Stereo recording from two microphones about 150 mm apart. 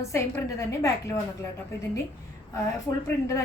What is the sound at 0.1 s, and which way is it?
A woman's voice, 20° left (ahead or behind).